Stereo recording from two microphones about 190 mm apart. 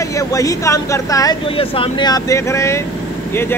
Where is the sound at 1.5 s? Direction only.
30° left (ahead or behind).